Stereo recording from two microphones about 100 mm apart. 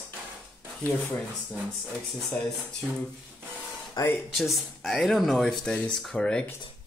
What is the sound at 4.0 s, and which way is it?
Speech, 45° left (ahead or behind).